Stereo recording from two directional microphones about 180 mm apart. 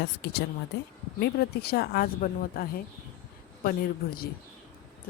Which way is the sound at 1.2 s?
60° left (ahead or behind).